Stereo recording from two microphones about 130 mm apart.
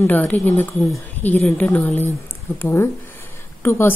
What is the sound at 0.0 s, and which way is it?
A woman's voice, 15° left (ahead or behind).